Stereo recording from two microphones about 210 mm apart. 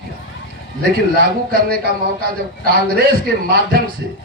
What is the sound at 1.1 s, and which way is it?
Speech, 45° right (ahead or behind).